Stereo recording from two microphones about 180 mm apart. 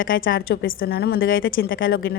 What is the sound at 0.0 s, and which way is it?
Speech, 90° left.